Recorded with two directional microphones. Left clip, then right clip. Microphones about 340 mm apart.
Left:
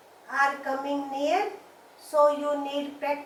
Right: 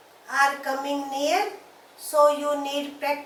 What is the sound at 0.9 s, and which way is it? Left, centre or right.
Speech, left.